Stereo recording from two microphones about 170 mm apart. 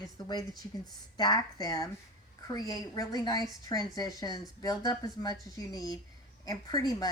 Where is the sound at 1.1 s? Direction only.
25° left (ahead or behind).